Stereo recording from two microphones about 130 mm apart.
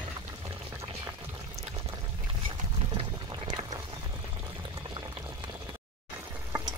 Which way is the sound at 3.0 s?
35° right (ahead or behind).